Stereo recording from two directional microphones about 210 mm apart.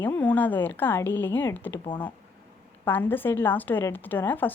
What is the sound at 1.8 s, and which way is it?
Speech, 25° left (ahead or behind).